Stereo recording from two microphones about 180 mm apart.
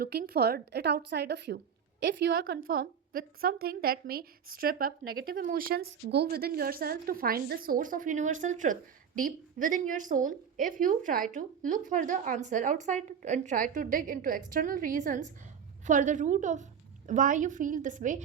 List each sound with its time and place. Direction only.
0.0 s a woman's voice: 60° right (ahead or behind)
2.3 s a woman's voice: 55° right (ahead or behind)